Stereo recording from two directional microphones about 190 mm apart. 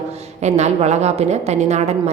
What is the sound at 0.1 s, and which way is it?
A woman's voice, 35° right (ahead or behind).